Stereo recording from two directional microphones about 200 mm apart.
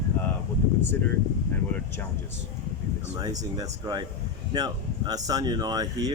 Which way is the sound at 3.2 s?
20° right (ahead or behind).